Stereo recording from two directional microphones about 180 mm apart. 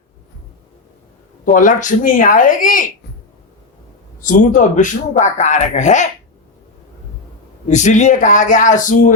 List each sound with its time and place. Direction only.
1.5 s speech: 45° left (ahead or behind)
4.2 s a man's voice: 45° left (ahead or behind)
7.7 s speech: 40° left (ahead or behind)